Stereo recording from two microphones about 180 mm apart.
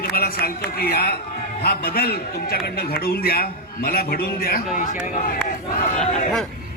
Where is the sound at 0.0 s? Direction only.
55° left (ahead or behind).